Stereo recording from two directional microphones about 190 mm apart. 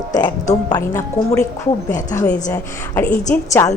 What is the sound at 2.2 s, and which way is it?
Speech, 40° left (ahead or behind).